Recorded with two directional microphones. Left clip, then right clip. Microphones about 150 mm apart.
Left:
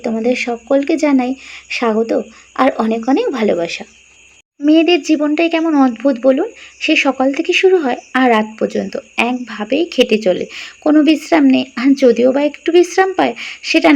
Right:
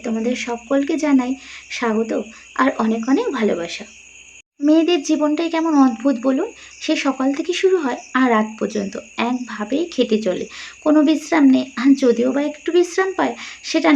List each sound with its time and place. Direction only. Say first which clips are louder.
0.0 s speech: left 6 dB; 20° left (ahead or behind)